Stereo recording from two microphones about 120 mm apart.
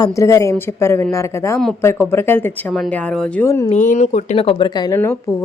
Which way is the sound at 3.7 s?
85° left.